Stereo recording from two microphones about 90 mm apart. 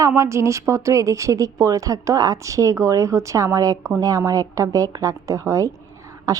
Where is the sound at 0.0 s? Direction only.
35° right (ahead or behind).